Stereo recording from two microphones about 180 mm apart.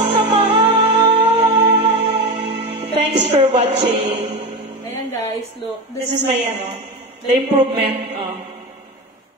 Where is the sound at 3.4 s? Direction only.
35° right (ahead or behind).